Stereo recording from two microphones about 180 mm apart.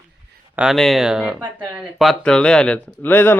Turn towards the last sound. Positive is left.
turn(degrees=10)  # may be behind; listen again after turning